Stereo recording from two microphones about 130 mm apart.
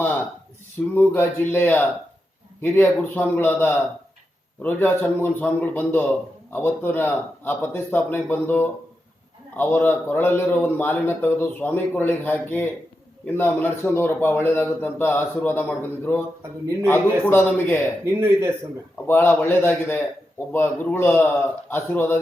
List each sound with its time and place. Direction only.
0.9 s a man's voice: 15° left (ahead or behind)
18.0 s speech: 20° right (ahead or behind)
19.0 s a man's voice: 15° left (ahead or behind)